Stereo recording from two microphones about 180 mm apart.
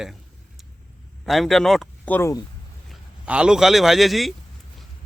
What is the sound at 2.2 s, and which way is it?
Speech, 15° left (ahead or behind).